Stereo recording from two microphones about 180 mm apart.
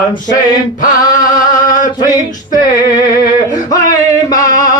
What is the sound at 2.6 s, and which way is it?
Male singing, 20° left (ahead or behind).